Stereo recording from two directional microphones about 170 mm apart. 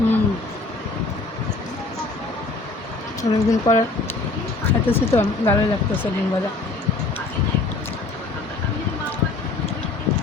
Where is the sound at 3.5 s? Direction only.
20° left (ahead or behind).